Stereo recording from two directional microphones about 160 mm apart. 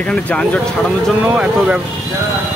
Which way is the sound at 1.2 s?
10° right (ahead or behind).